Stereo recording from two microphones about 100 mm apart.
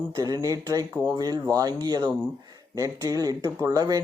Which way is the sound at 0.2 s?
35° right (ahead or behind).